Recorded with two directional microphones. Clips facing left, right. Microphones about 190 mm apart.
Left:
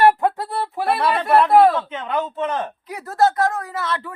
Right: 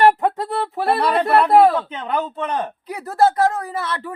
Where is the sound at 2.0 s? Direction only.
35° right (ahead or behind).